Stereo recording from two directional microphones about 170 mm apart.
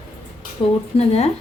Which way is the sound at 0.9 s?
35° left (ahead or behind).